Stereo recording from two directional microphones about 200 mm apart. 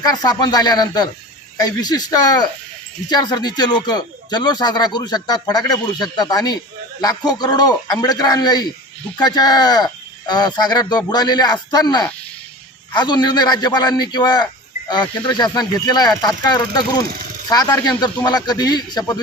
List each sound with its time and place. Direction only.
0.0 s speech: 20° left (ahead or behind)